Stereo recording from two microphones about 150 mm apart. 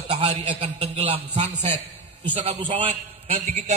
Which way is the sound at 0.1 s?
45° right (ahead or behind).